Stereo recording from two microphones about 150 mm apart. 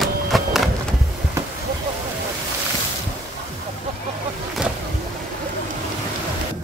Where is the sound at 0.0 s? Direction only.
Centre (ahead or behind).